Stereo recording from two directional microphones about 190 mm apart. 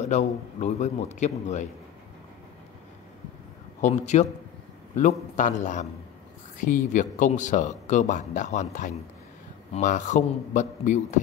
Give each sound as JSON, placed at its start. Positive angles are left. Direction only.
{"t": 0.0, "sound": "speech", "side_deg": 35}
{"t": 3.8, "sound": "speech", "side_deg": 35}
{"t": 5.3, "sound": "speech", "side_deg": 40}